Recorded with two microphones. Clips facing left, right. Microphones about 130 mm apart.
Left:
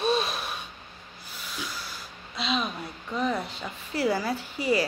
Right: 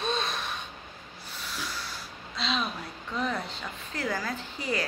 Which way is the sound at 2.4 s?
Centre (ahead or behind).